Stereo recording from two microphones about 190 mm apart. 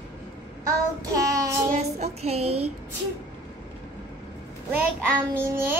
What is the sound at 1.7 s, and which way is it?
Speech, 35° right (ahead or behind).